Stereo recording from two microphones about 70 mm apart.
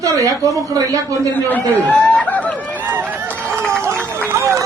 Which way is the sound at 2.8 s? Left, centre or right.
Right.